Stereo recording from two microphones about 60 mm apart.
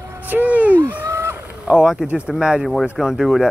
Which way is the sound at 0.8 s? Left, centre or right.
Right.